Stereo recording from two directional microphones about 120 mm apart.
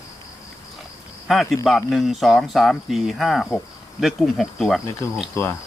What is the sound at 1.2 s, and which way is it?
Speech, centre (ahead or behind).